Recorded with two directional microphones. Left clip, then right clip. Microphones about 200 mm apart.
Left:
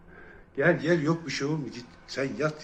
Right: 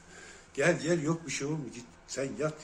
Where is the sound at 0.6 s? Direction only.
5° right (ahead or behind).